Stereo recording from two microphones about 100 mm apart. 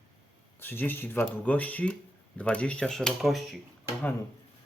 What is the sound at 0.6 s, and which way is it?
Speech, 20° left (ahead or behind).